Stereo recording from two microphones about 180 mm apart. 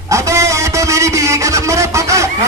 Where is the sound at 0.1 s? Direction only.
15° right (ahead or behind).